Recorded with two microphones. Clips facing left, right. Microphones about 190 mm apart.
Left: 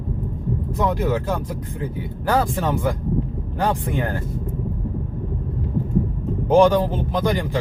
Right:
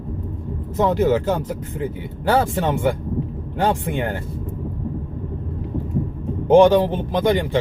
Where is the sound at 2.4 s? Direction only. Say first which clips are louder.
Right 2 dB; 20° right (ahead or behind).